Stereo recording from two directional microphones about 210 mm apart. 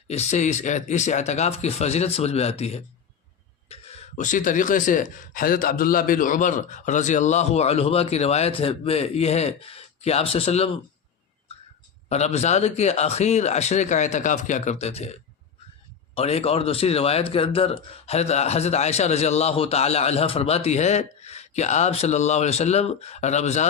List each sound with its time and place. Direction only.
0.1 s speech: 35° left (ahead or behind)
12.0 s speech: 30° left (ahead or behind)
16.1 s speech: 30° left (ahead or behind)